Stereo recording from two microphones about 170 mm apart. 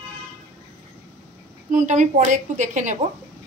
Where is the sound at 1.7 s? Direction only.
45° right (ahead or behind).